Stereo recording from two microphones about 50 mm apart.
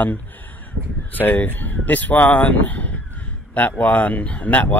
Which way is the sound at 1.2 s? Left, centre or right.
Left.